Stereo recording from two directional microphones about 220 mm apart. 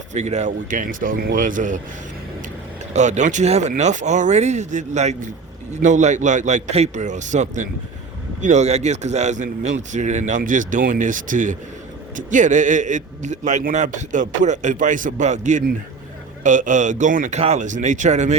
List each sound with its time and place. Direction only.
0.1 s a man's voice: 30° right (ahead or behind)
2.9 s a man's voice: 35° right (ahead or behind)